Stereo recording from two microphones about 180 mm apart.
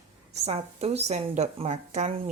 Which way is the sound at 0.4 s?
35° right (ahead or behind).